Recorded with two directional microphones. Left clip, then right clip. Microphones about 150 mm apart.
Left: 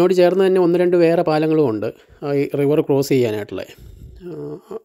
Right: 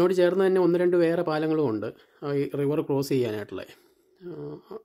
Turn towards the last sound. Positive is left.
turn(degrees=35)  # may be behind; listen again after turning